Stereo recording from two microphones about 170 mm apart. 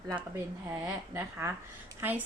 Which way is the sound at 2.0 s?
10° right (ahead or behind).